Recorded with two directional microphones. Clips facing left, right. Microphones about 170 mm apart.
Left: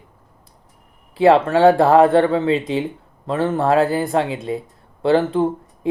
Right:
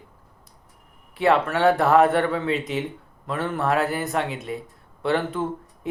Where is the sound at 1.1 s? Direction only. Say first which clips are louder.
Left 7 dB; 30° left (ahead or behind).